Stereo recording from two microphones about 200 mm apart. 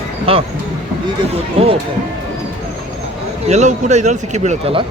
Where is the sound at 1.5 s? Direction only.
30° right (ahead or behind).